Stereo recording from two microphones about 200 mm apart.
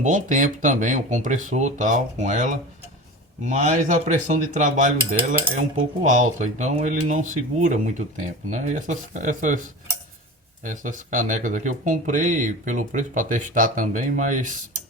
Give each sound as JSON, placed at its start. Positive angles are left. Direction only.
{"t": 0.0, "sound": "speech", "side_deg": -40}
{"t": 6.0, "sound": "speech", "side_deg": -40}
{"t": 10.6, "sound": "speech", "side_deg": -40}